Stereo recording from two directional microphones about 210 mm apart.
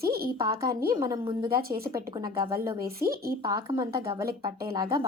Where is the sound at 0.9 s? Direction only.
20° right (ahead or behind).